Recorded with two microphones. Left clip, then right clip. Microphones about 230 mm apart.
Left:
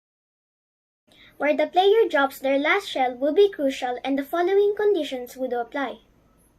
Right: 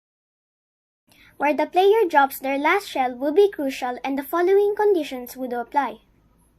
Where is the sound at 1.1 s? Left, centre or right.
Right.